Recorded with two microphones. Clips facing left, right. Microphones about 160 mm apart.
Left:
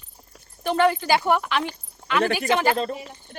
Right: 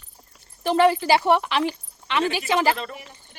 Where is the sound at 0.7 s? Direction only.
30° right (ahead or behind).